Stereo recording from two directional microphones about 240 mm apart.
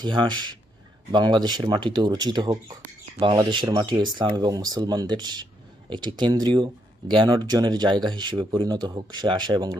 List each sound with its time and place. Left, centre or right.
0.0 s speech: centre